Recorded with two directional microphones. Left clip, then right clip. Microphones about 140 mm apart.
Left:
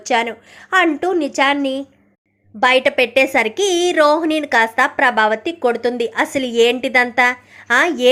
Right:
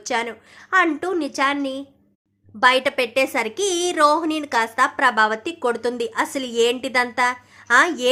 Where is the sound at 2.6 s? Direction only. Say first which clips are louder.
Left 4 dB; 5° left (ahead or behind).